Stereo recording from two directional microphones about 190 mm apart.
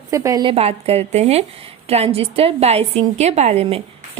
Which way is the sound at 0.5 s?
30° right (ahead or behind).